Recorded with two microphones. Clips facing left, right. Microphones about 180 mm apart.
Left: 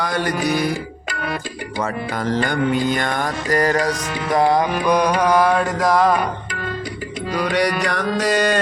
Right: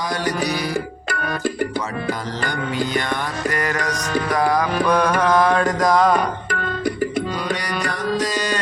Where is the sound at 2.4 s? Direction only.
50° left (ahead or behind).